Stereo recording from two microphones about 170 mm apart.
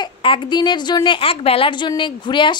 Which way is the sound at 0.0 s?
30° left (ahead or behind).